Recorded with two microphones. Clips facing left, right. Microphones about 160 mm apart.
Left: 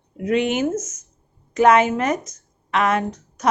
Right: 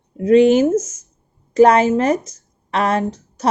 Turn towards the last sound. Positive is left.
turn(degrees=-30)  # may be behind; listen again after turning